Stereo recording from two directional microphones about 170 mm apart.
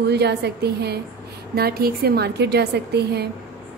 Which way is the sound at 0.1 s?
75° right (ahead or behind).